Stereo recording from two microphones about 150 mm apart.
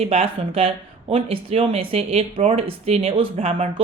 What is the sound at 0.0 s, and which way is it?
A woman's voice, 40° right (ahead or behind).